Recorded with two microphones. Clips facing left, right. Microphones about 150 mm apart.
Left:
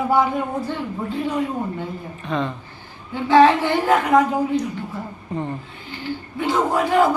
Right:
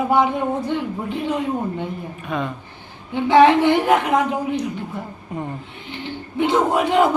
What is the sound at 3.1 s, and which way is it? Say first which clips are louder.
A woman's voice: right 1 dB; 20° right (ahead or behind).